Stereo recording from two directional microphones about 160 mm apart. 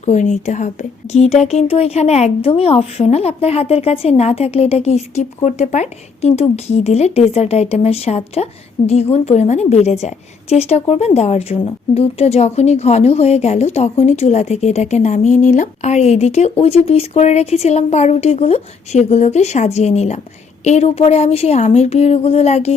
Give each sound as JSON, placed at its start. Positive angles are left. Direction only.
{"t": 0.0, "sound": "a woman's voice", "side_deg": 45}